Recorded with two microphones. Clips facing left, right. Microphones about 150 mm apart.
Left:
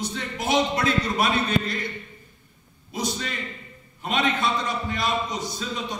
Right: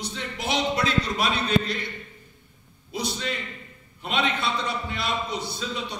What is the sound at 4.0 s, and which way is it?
A man's voice, 45° left (ahead or behind).